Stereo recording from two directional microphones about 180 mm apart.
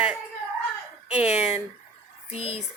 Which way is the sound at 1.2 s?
35° left (ahead or behind).